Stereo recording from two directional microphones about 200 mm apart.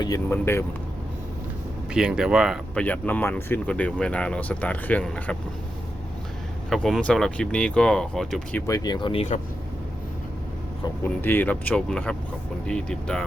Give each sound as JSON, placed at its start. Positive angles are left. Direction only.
{"t": 0.0, "sound": "speech", "side_deg": 15}
{"t": 1.9, "sound": "speech", "side_deg": -5}
{"t": 6.7, "sound": "speech", "side_deg": 0}
{"t": 8.6, "sound": "speech", "side_deg": 20}
{"t": 10.8, "sound": "speech", "side_deg": 10}